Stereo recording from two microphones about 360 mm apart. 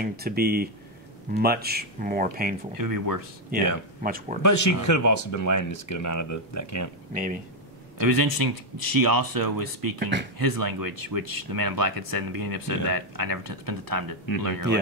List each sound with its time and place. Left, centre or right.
0.0 s speech: right
2.8 s speech: right
4.0 s speech: right
4.4 s speech: left
8.0 s speech: right